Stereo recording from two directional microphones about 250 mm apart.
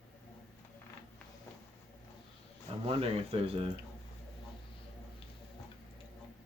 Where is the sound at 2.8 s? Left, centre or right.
Right.